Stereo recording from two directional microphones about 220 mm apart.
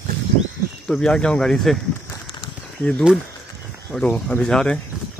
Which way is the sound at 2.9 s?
5° left (ahead or behind).